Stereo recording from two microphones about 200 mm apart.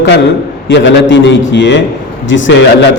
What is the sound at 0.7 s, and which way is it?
A man's voice, 65° left (ahead or behind).